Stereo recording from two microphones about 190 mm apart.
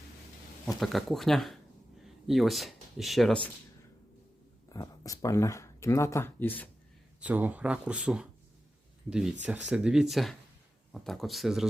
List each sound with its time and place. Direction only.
0.8 s speech: centre (ahead or behind)
4.7 s speech: 20° left (ahead or behind)
7.2 s speech: 10° right (ahead or behind)